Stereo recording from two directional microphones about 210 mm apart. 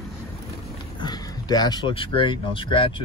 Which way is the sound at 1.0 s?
20° left (ahead or behind).